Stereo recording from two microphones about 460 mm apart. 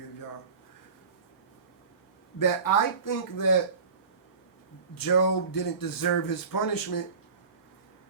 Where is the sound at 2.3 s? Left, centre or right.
Left.